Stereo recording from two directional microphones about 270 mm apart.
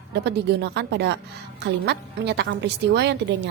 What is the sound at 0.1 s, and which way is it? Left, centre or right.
A woman's voice, right.